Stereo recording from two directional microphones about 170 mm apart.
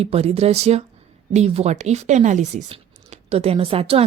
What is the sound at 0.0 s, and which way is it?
A woman's voice, 35° right (ahead or behind).